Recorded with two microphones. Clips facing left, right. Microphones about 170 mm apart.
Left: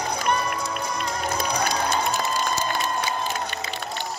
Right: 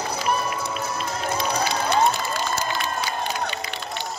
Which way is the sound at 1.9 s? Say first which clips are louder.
Right 3 dB; 65° right (ahead or behind).